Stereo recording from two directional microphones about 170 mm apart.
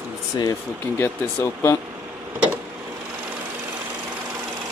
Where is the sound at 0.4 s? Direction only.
20° left (ahead or behind).